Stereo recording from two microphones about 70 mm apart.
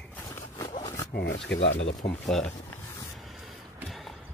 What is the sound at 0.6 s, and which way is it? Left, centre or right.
Dog, left.